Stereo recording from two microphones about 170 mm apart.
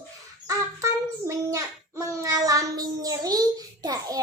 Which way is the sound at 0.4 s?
20° right (ahead or behind).